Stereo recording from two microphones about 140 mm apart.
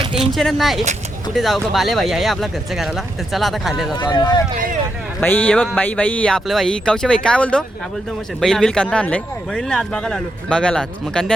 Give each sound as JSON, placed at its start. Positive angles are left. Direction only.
{"t": 0.0, "sound": "a sound", "side_deg": -35}
{"t": 0.3, "sound": "speech", "side_deg": 0}
{"t": 3.9, "sound": "speech", "side_deg": 30}
{"t": 5.2, "sound": "speech", "side_deg": 15}